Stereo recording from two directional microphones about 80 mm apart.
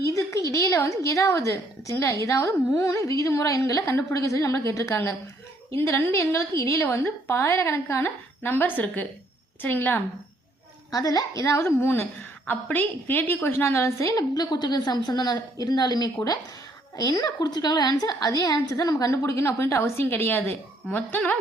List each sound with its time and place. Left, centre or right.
0.0 s a sound: left
0.5 s a woman's voice: left
10.9 s a woman's voice: left
14.3 s a woman's voice: left